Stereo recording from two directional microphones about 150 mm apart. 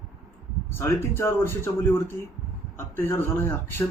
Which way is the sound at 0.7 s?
15° left (ahead or behind).